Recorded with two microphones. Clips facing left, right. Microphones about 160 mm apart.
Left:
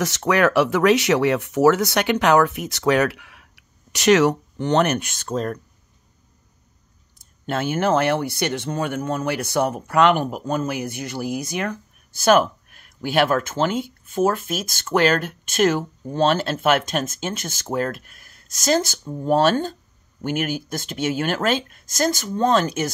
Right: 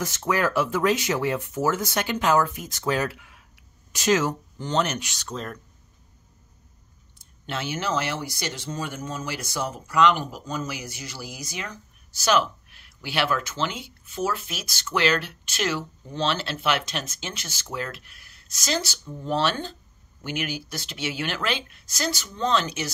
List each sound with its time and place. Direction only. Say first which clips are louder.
0.0 s speech: left 6 dB; 85° left; by 5.6 s 45° left (ahead or behind)
7.2 s speech: left 7 dB; 45° left (ahead or behind)